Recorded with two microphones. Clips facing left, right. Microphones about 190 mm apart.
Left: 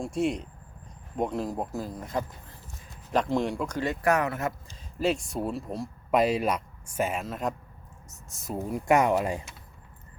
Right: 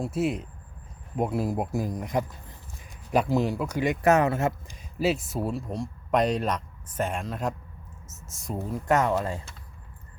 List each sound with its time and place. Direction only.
0.0 s speech: 5° right (ahead or behind)
4.1 s speech: 25° right (ahead or behind)
4.7 s speech: 5° right (ahead or behind)
8.5 s speech: 10° left (ahead or behind)